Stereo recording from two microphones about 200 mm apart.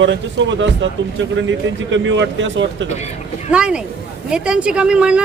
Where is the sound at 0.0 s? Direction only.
65° right (ahead or behind).